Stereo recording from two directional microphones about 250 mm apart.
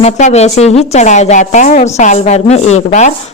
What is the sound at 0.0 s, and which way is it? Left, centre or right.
Speech, left.